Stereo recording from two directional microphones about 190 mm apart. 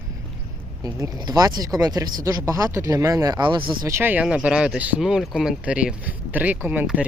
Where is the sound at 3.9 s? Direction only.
10° right (ahead or behind).